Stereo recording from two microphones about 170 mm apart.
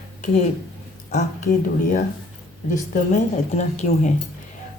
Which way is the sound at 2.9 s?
45° left (ahead or behind).